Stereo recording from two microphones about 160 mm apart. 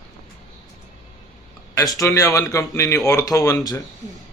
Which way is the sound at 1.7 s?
20° left (ahead or behind).